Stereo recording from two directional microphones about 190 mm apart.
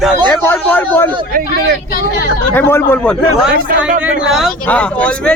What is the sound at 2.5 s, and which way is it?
Speech, 10° left (ahead or behind).